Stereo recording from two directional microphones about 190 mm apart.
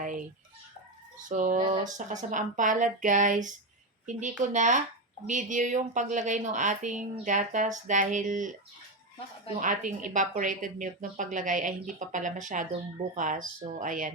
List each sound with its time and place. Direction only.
0.0 s a sound: 45° right (ahead or behind)
1.2 s speech: 45° right (ahead or behind)
1.5 s speech: 25° right (ahead or behind)
2.3 s a woman's voice: 40° right (ahead or behind)
9.6 s speech: 45° right (ahead or behind)